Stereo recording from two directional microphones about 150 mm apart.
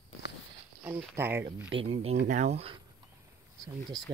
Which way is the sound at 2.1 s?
55° right (ahead or behind).